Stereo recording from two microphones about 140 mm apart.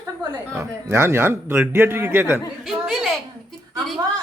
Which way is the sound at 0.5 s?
20° right (ahead or behind).